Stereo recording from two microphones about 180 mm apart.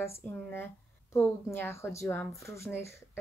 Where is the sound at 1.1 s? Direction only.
10° left (ahead or behind).